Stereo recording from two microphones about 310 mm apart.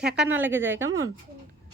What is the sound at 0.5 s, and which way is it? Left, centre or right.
Speech, right.